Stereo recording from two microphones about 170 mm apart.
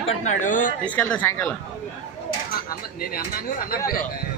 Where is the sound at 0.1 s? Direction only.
45° left (ahead or behind).